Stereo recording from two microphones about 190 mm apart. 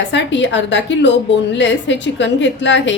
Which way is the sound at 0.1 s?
70° left (ahead or behind).